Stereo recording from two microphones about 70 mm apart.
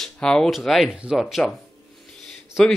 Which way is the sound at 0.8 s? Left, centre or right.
Centre.